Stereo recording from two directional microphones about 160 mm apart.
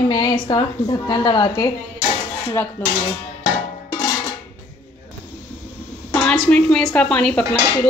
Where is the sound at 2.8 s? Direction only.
10° left (ahead or behind).